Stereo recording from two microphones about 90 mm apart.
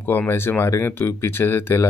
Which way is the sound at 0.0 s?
25° left (ahead or behind).